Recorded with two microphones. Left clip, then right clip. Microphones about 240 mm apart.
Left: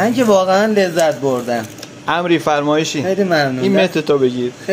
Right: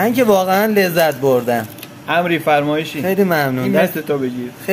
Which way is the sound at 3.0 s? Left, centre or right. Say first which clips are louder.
Left 1 dB; right.